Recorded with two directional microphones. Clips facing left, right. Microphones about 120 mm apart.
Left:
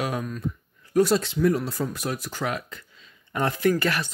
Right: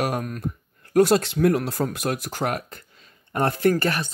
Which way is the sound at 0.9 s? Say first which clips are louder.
Right 3 dB; 70° right (ahead or behind).